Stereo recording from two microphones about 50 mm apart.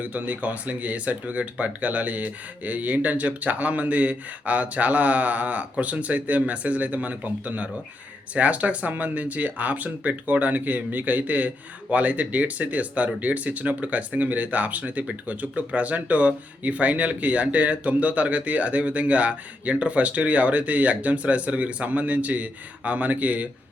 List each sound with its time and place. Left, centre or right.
0.0 s speech: right